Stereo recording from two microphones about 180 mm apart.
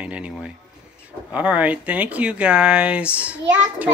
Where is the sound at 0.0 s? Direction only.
5° right (ahead or behind).